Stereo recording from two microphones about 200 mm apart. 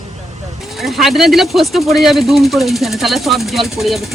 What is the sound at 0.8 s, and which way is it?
Speech, centre (ahead or behind).